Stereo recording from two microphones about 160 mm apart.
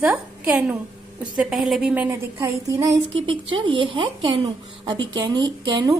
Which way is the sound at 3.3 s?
30° right (ahead or behind).